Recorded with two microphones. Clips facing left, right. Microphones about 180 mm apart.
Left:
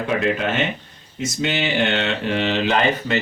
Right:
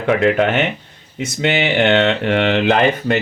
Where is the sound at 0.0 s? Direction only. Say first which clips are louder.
Right 6 dB; 65° right (ahead or behind).